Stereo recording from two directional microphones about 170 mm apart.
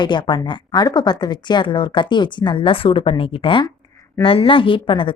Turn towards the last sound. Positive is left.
turn(degrees=30)  # may be behind; listen again after turning